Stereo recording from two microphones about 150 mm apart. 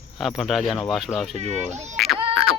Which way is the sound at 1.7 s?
50° right (ahead or behind).